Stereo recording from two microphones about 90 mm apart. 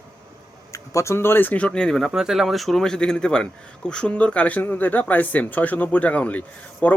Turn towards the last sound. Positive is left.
turn(degrees=15)  # may be behind; listen again after turning